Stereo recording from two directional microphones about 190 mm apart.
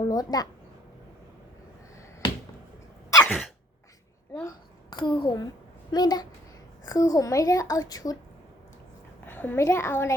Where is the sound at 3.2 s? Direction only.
5° left (ahead or behind).